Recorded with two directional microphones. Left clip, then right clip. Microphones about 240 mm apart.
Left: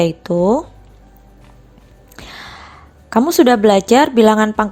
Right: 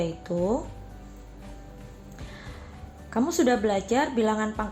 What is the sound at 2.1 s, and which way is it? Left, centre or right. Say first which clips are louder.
Music: left 13 dB; left.